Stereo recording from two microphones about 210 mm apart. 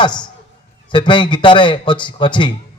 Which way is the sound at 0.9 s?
20° left (ahead or behind).